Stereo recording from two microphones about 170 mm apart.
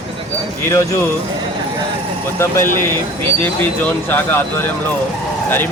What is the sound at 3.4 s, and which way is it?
Speech, 10° left (ahead or behind).